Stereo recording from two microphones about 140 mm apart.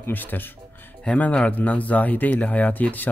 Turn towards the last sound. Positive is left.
turn(degrees=10)  # may be behind; listen again after turning